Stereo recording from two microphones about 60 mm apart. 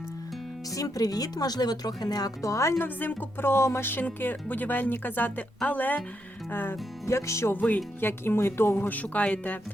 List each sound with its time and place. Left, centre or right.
0.7 s speech: left
2.7 s speech: left
7.0 s music: left
7.5 s speech: left
8.0 s speech: left
8.9 s speech: left